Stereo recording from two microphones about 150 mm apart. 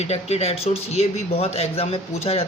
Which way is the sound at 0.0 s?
45° left (ahead or behind).